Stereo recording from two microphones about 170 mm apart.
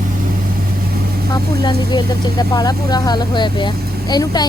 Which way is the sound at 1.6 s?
25° left (ahead or behind).